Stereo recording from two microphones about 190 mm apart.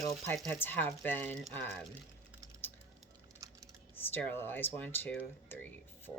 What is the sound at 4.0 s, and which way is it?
Speech, 10° left (ahead or behind).